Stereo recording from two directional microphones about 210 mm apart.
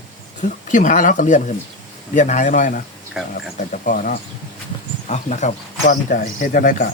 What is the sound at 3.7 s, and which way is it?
Speech, 40° left (ahead or behind).